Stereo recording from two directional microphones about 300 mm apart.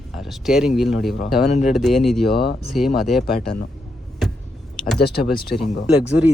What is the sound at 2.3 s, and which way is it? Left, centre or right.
Speech, left.